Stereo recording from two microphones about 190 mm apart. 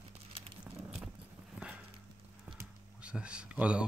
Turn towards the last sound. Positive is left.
turn(degrees=-5)  # may be behind; listen again after turning